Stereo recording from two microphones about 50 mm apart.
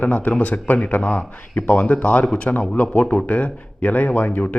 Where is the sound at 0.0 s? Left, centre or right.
Left.